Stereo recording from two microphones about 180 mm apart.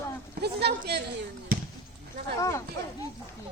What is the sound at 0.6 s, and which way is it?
Speech, 65° right (ahead or behind).